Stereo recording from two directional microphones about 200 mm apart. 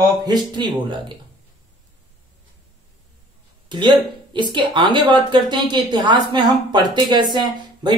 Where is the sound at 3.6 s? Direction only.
25° right (ahead or behind).